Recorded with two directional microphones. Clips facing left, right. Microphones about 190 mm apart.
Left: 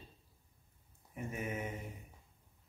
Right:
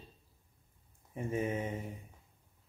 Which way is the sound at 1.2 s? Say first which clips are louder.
Right 6 dB; 30° right (ahead or behind).